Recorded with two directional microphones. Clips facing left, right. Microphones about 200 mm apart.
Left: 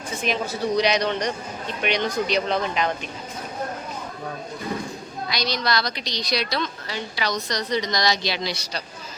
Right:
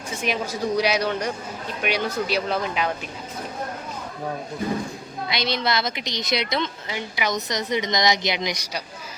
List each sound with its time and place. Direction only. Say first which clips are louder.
0.2 s speech: even; 10° right (ahead or behind)
5.3 s a woman's voice: right 1 dB; 25° right (ahead or behind)